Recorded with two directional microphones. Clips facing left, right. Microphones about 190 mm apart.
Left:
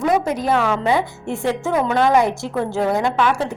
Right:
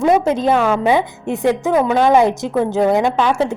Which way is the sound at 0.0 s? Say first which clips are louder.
Right 5 dB; 25° right (ahead or behind).